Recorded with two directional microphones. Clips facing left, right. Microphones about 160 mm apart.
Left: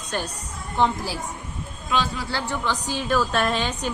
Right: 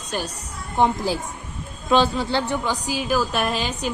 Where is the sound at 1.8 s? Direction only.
30° right (ahead or behind).